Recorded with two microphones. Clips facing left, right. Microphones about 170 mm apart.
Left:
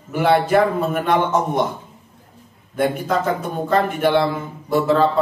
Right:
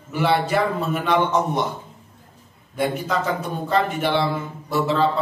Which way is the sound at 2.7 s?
50° left (ahead or behind).